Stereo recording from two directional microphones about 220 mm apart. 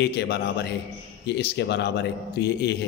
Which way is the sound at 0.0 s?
50° left (ahead or behind).